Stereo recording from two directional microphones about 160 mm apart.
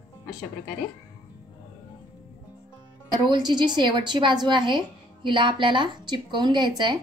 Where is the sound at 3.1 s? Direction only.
25° right (ahead or behind).